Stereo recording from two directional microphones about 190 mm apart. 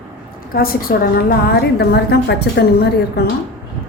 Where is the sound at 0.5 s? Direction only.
50° left (ahead or behind).